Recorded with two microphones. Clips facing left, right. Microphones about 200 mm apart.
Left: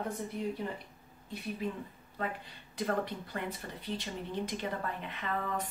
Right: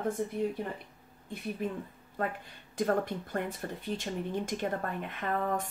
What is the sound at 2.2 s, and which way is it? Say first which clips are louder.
A woman's voice: right 3 dB; 50° right (ahead or behind).